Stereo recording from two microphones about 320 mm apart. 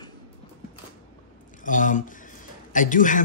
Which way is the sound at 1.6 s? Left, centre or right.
Left.